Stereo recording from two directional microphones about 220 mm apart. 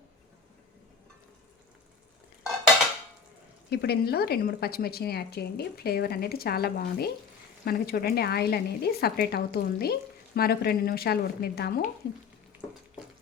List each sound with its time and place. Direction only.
3.7 s speech: 50° left (ahead or behind)